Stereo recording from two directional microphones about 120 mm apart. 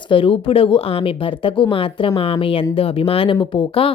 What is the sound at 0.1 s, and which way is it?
A woman's voice, 50° left (ahead or behind).